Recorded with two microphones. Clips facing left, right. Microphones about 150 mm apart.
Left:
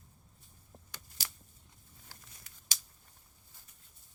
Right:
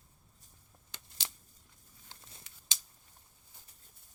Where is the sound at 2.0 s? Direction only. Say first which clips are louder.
Right 2 dB; 25° right (ahead or behind).